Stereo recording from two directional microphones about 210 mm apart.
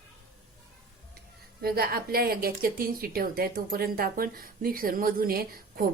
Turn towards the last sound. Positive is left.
turn(degrees=-45)  # may be behind; listen again after turning